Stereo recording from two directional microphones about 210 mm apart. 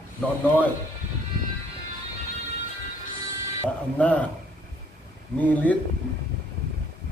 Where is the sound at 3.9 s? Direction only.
5° left (ahead or behind).